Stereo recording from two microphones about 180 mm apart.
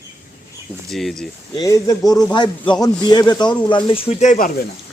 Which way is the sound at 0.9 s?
5° left (ahead or behind).